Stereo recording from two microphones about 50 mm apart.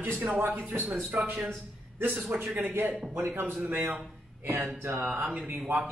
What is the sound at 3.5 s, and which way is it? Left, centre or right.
Speech, right.